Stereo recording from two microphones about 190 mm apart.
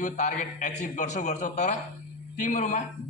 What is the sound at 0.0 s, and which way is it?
A man's voice, 40° left (ahead or behind).